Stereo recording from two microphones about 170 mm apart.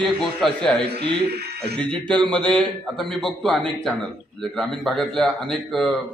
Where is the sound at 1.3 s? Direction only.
70° right (ahead or behind).